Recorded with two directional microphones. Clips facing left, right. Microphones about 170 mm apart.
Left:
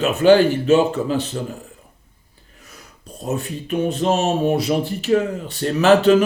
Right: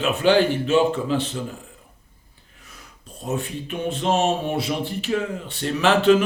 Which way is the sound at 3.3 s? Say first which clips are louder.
Left 7 dB; 40° left (ahead or behind).